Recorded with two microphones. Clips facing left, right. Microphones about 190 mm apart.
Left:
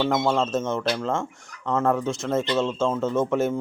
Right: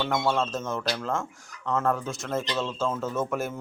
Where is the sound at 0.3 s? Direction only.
25° left (ahead or behind).